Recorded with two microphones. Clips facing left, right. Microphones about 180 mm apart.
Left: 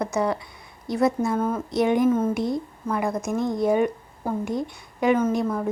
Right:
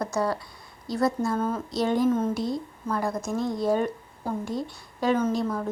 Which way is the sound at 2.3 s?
20° left (ahead or behind).